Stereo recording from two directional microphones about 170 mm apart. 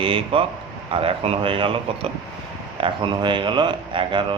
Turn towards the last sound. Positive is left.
turn(degrees=-30)  # may be behind; listen again after turning